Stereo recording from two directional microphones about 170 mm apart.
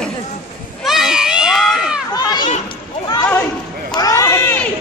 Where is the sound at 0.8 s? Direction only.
5° right (ahead or behind).